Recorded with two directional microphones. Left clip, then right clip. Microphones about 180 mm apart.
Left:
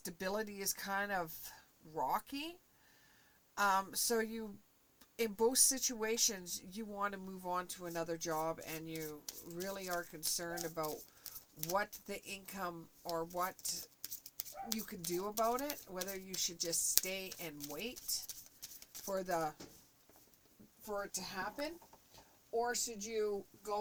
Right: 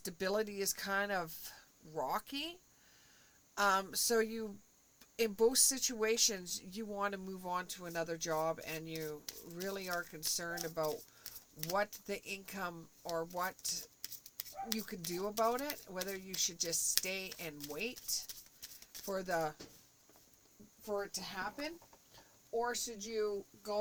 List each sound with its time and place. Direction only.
0.0 s speech: 35° right (ahead or behind)
9.6 s speech: 40° right (ahead or behind)
20.8 s speech: 35° right (ahead or behind)